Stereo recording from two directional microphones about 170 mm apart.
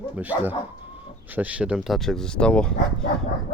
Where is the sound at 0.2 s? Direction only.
10° right (ahead or behind).